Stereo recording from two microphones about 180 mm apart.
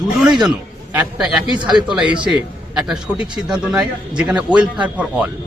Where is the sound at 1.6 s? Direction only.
25° right (ahead or behind).